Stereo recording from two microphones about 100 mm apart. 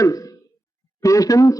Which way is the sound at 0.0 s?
35° left (ahead or behind).